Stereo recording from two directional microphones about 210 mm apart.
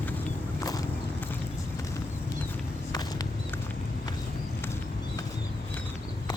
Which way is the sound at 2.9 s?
20° left (ahead or behind).